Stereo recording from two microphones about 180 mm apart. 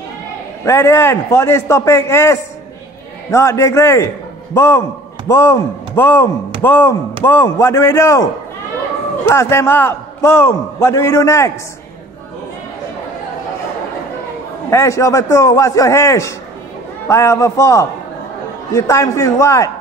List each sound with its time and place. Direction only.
0.7 s a man's voice: 15° left (ahead or behind)
9.3 s a man's voice: 15° left (ahead or behind)
14.7 s a man's voice: 15° left (ahead or behind)